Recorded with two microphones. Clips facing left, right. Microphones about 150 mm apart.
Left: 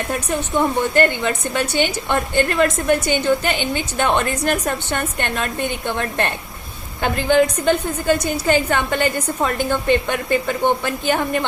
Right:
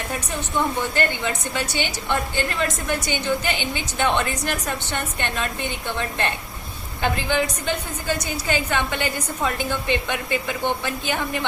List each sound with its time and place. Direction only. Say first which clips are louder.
0.1 s a woman's voice: left 6 dB; 50° left (ahead or behind)